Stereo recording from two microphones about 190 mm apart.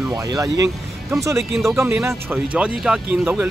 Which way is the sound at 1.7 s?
15° right (ahead or behind).